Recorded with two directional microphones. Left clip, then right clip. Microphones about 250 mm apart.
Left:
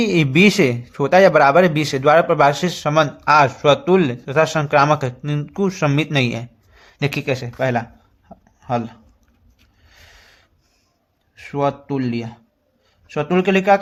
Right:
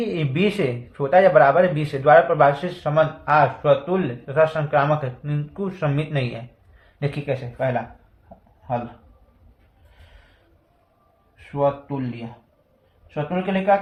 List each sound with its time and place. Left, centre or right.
0.0 s a man's voice: left
11.5 s a man's voice: left
13.1 s a man's voice: left